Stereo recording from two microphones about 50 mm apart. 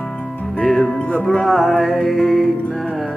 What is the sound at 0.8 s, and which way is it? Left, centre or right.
Music, left.